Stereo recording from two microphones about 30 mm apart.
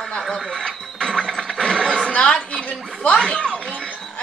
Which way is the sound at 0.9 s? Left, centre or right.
Left.